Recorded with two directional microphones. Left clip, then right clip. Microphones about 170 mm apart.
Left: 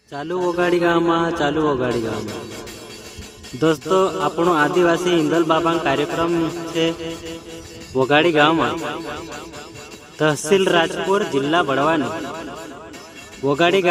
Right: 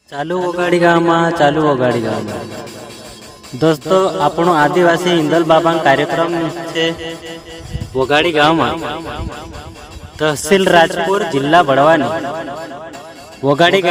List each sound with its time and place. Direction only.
0.1 s a man's voice: 40° right (ahead or behind)
3.6 s a man's voice: 30° right (ahead or behind)